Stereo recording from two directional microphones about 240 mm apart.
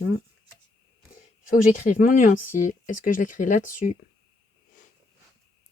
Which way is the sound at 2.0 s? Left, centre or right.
Left.